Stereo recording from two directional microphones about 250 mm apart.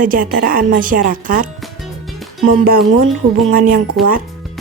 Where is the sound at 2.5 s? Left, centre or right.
Right.